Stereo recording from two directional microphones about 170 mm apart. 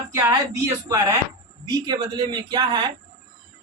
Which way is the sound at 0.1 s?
20° right (ahead or behind).